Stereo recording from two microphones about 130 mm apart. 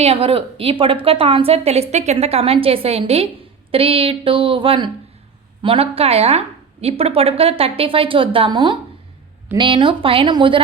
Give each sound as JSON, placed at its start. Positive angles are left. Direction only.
{"t": 0.0, "sound": "a woman's voice", "side_deg": -50}